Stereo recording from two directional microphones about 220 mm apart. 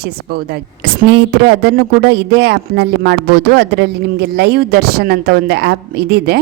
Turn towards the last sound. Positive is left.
turn(degrees=-45)  # may be behind; listen again after turning